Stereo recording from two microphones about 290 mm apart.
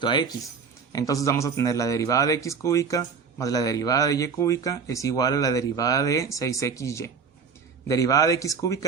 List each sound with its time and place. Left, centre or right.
0.0 s speech: centre